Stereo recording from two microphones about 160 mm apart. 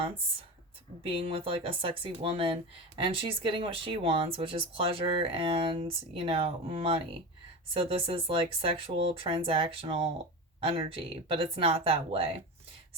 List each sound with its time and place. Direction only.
1.0 s speech: 35° right (ahead or behind)